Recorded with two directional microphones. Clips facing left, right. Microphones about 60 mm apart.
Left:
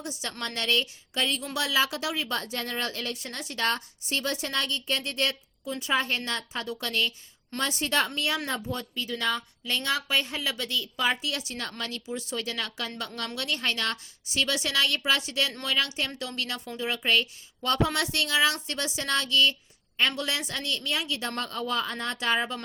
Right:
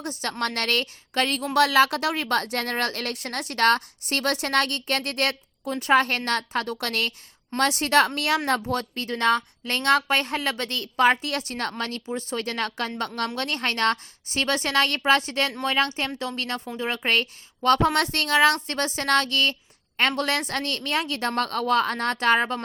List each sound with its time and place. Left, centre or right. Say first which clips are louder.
0.0 s a woman's voice: right 7 dB; right